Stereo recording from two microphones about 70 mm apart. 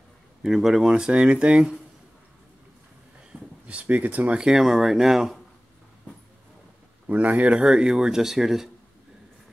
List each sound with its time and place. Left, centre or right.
0.4 s speech: centre
3.6 s speech: centre
7.1 s speech: right; by 8.6 s centre